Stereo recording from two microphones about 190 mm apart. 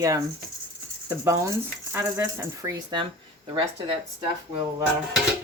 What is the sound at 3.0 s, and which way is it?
Speech, 25° right (ahead or behind).